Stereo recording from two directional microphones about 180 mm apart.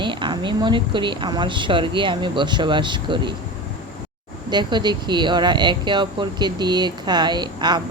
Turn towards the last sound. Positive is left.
turn(degrees=-25)  # may be behind; listen again after turning